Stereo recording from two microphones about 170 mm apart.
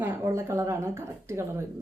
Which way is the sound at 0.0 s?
15° right (ahead or behind).